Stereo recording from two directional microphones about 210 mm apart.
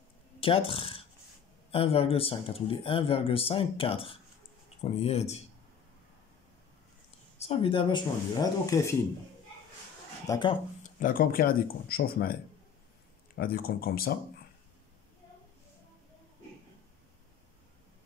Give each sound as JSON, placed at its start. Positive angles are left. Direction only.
{"t": 0.4, "sound": "speech", "side_deg": 25}
{"t": 7.3, "sound": "speech", "side_deg": 25}
{"t": 10.2, "sound": "speech", "side_deg": 20}
{"t": 10.8, "sound": "speech", "side_deg": 40}
{"t": 13.4, "sound": "speech", "side_deg": 45}